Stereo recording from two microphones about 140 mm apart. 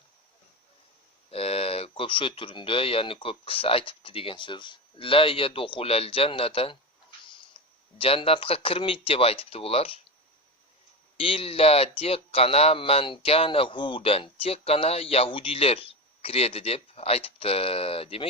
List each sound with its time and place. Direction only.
1.3 s speech: 45° left (ahead or behind)
7.6 s a sound: 40° left (ahead or behind)
7.9 s speech: 45° left (ahead or behind)
11.2 s speech: 40° left (ahead or behind)